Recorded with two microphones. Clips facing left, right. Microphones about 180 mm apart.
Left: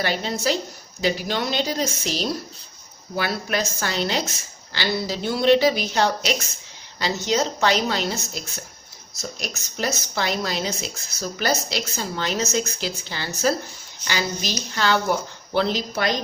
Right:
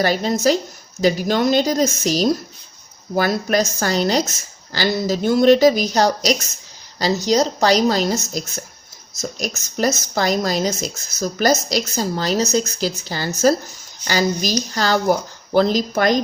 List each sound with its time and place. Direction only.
0.0 s a woman's voice: 40° right (ahead or behind)